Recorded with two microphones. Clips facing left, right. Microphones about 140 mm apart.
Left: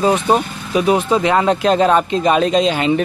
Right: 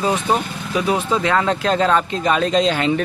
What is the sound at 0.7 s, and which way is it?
Speech, 20° left (ahead or behind).